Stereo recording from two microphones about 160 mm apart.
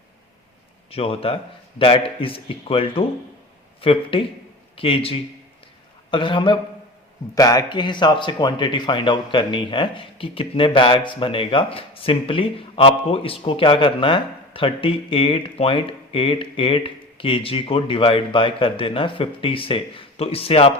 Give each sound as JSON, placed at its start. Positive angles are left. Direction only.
{"t": 0.9, "sound": "speech", "side_deg": 35}